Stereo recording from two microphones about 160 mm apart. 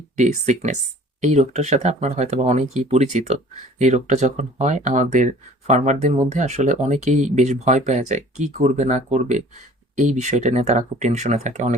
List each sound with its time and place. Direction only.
0.2 s speech: 45° right (ahead or behind)